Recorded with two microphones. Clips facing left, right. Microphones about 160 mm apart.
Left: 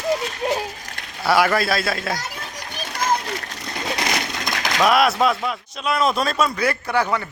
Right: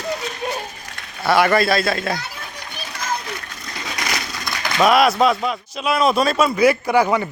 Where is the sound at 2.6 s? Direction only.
40° left (ahead or behind).